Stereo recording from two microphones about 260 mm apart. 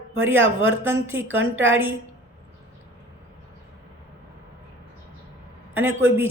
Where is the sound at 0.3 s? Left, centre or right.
Right.